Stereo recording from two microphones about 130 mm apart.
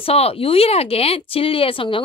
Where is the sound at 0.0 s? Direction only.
50° left (ahead or behind).